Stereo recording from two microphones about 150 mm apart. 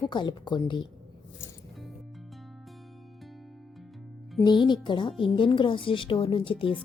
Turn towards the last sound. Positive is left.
turn(degrees=35)  # may be behind; listen again after turning